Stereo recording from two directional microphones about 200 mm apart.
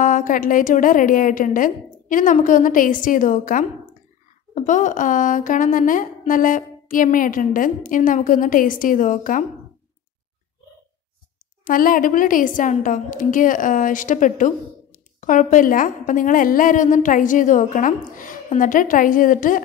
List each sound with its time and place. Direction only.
0.0 s a woman's voice: 40° left (ahead or behind)
11.6 s a woman's voice: 45° left (ahead or behind)